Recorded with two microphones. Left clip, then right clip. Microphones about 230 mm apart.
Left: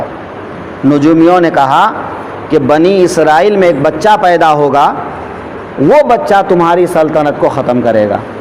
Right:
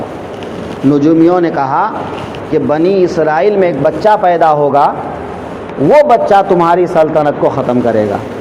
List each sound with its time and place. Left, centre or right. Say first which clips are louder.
0.9 s speech: left 2 dB; left
5.9 s speech: even; left